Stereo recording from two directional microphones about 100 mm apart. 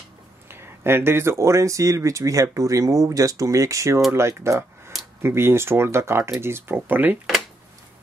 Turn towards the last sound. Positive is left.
turn(degrees=-20)  # may be behind; listen again after turning